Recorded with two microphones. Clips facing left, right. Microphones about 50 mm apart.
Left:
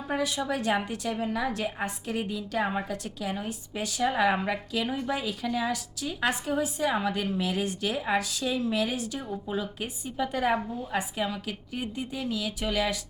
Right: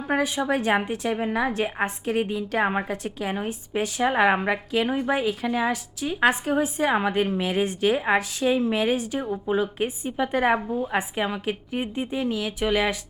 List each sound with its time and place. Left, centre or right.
0.1 s a woman's voice: right